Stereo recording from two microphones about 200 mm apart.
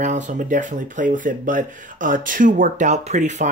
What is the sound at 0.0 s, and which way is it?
Speech, 35° right (ahead or behind).